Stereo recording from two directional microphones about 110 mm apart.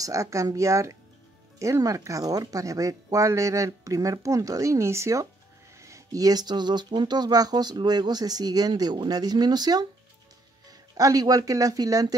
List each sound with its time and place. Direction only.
0.0 s speech: 30° right (ahead or behind)
11.0 s speech: 35° right (ahead or behind)